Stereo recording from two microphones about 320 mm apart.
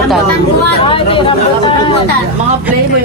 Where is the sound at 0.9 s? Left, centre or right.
Centre.